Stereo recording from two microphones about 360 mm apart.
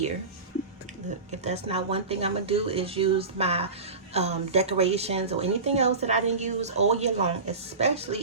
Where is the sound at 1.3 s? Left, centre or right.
Centre.